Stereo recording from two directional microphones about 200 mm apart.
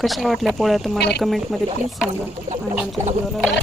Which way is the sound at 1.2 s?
Centre (ahead or behind).